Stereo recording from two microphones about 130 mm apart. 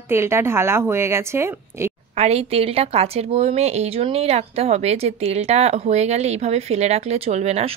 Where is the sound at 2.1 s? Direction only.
50° right (ahead or behind).